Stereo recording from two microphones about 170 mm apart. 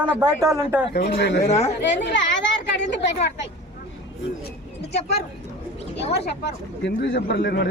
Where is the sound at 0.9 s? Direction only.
80° left.